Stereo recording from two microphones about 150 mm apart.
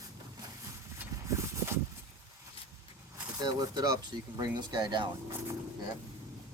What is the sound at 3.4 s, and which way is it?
Speech, 30° right (ahead or behind).